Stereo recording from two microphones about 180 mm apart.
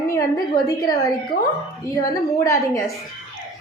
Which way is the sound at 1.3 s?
60° left (ahead or behind).